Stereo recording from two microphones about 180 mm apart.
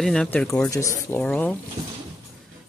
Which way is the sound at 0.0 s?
5° left (ahead or behind).